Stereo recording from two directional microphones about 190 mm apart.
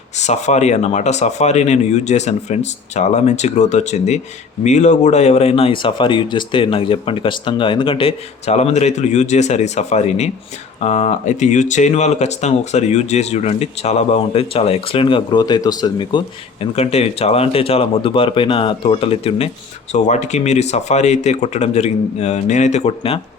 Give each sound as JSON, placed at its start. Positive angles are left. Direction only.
{"t": 0.2, "sound": "speech", "side_deg": 35}